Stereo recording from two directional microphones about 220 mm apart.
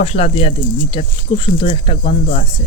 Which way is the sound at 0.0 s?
25° left (ahead or behind).